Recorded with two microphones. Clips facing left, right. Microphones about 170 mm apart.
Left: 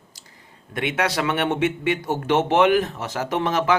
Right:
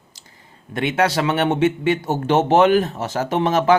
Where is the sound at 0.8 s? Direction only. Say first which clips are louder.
Right 4 dB; 30° right (ahead or behind).